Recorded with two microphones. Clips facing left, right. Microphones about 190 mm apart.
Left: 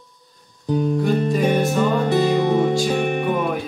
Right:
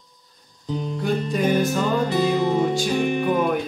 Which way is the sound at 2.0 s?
65° left (ahead or behind).